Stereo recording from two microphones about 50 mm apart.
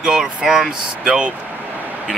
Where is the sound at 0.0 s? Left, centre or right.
Centre.